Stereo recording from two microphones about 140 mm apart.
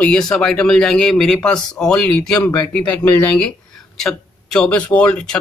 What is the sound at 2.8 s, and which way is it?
Speech, 25° left (ahead or behind).